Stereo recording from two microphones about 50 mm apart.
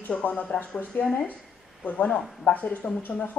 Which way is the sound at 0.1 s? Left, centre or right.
Left.